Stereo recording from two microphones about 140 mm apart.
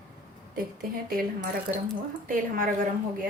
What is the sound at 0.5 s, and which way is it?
A woman's voice, 90° right.